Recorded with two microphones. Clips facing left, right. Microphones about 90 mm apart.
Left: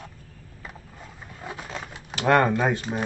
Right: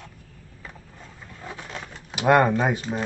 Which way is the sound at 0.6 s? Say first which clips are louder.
Left 1 dB; 10° left (ahead or behind).